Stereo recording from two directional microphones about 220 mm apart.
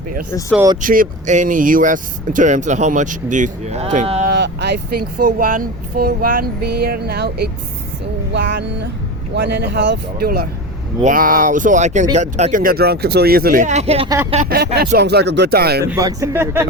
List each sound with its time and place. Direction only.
0.8 s speech: 35° right (ahead or behind)
4.3 s speech: 50° right (ahead or behind); by 14.1 s 25° right (ahead or behind)
14.5 s speech: 45° right (ahead or behind)
15.9 s speech: 15° right (ahead or behind)